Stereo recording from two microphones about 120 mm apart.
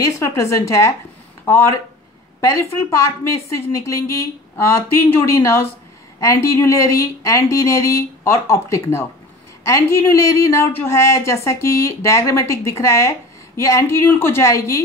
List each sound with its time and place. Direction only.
0.2 s speech: 25° left (ahead or behind)